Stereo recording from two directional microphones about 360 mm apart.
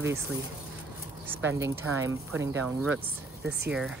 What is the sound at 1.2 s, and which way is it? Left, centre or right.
Speech, centre.